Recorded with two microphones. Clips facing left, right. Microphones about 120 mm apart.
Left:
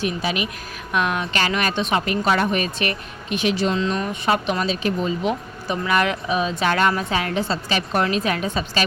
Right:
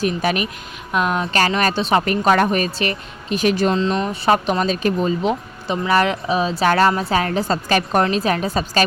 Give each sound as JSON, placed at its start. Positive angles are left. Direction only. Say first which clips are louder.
{"t": 0.0, "sound": "speech", "louder": "right 4 dB", "side_deg": -50}
{"t": 0.9, "sound": "speech", "louder": "right 3 dB", "side_deg": -30}
{"t": 5.3, "sound": "speech", "louder": "right 3 dB", "side_deg": -25}
{"t": 8.0, "sound": "speech", "louder": "right 3 dB", "side_deg": -35}